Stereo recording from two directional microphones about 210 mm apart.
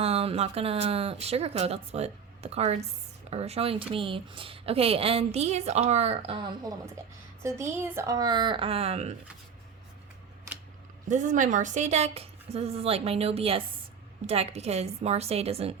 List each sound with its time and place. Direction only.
0.0 s speech: 30° right (ahead or behind)
11.1 s speech: 35° right (ahead or behind)